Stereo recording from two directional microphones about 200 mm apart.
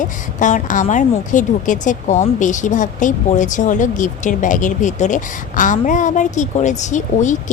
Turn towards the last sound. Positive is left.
turn(degrees=40)  # may be behind; listen again after turning